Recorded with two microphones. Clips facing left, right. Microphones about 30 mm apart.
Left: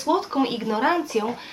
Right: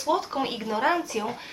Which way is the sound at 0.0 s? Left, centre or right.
Centre.